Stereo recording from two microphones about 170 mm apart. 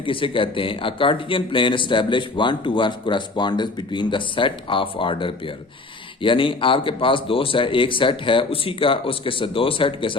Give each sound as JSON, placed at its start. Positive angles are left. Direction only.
{"t": 0.0, "sound": "speech", "side_deg": 30}